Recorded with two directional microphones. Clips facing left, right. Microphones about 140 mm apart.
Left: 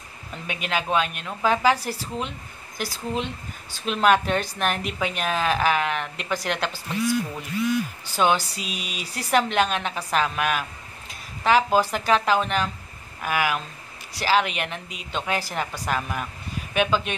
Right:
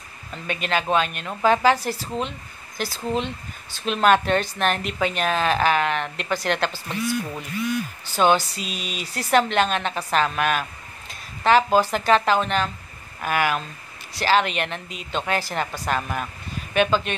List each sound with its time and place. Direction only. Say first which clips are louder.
0.5 s a woman's voice: right 3 dB; 5° left (ahead or behind)
8.2 s a woman's voice: right 3 dB; 5° left (ahead or behind)